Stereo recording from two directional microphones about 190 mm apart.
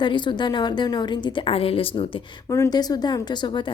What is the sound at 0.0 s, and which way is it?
Speech, 25° left (ahead or behind).